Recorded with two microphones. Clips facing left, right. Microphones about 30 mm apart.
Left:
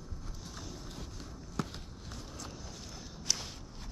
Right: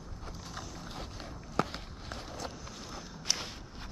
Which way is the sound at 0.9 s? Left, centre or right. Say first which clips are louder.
Right 4 dB; right.